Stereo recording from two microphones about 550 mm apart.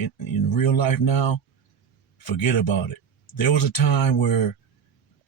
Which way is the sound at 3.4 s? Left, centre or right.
Left.